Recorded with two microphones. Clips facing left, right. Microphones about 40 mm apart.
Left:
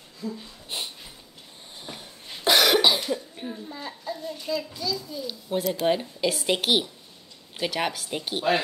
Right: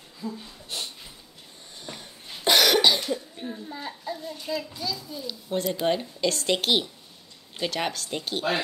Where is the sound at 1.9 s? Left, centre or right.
Centre.